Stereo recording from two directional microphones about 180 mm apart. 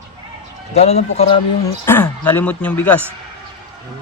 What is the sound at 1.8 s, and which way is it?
A man's voice, 10° left (ahead or behind).